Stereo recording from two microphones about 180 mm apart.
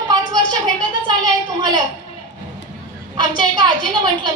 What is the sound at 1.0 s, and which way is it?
Speech, 25° right (ahead or behind).